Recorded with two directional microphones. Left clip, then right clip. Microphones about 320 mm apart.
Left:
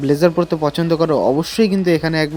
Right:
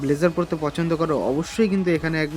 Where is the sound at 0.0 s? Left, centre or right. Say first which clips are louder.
Left 6 dB; centre.